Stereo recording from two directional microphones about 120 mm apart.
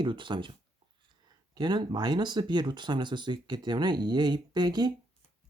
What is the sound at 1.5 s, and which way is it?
Speech, 35° right (ahead or behind).